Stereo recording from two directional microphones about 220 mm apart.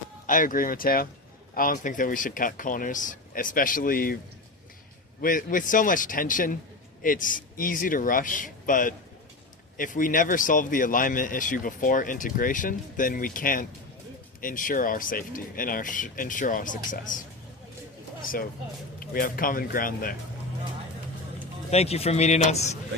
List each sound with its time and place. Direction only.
0.3 s speech: 40° left (ahead or behind)
5.2 s speech: 40° left (ahead or behind)
18.9 s speech: 40° left (ahead or behind)
21.7 s a man's voice: 30° left (ahead or behind)